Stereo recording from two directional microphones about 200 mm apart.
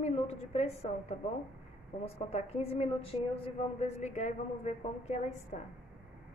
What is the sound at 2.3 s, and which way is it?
A woman's voice, 30° left (ahead or behind).